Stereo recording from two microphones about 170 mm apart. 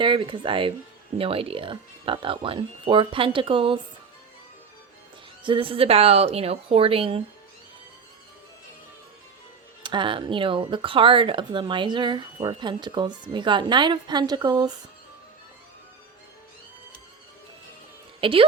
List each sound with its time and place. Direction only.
0.0 s speech: 30° right (ahead or behind)
5.4 s speech: 30° right (ahead or behind)
9.8 s speech: 30° right (ahead or behind)
18.2 s a woman's voice: 30° right (ahead or behind)